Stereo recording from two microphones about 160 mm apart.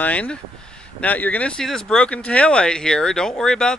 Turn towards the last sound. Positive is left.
turn(degrees=5)  # may be behind; listen again after turning